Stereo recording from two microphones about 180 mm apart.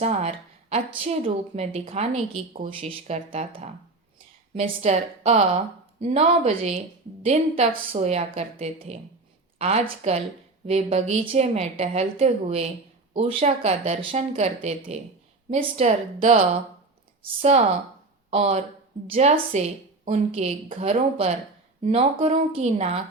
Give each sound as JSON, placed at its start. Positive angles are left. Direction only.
{"t": 0.0, "sound": "a woman's voice", "side_deg": -35}